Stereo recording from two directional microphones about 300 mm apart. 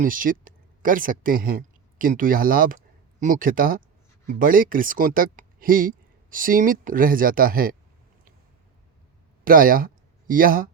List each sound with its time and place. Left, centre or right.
0.0 s speech: right
9.4 s speech: right